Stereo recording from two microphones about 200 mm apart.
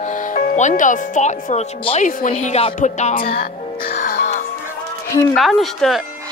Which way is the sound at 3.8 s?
45° left (ahead or behind).